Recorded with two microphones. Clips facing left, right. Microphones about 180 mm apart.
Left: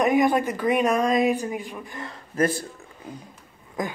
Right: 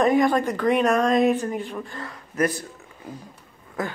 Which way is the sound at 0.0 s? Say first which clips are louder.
Right 1 dB; 15° left (ahead or behind).